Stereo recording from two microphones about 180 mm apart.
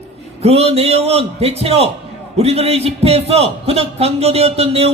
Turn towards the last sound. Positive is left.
turn(degrees=-35)  # may be behind; listen again after turning